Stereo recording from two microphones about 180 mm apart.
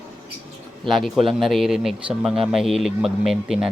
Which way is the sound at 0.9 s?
Centre (ahead or behind).